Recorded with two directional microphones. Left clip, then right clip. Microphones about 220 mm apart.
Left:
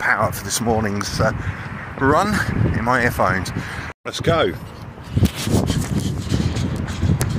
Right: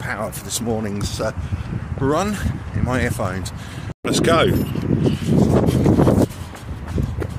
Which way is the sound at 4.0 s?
25° right (ahead or behind).